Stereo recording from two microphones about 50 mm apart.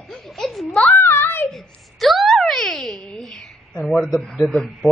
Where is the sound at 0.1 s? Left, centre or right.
Centre.